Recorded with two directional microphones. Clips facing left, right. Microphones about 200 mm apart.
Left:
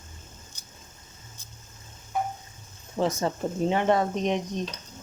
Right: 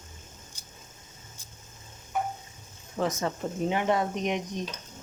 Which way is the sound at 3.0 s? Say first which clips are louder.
Left 3 dB; 30° left (ahead or behind).